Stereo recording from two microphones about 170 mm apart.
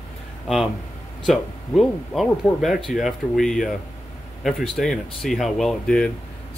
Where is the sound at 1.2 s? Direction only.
Centre (ahead or behind).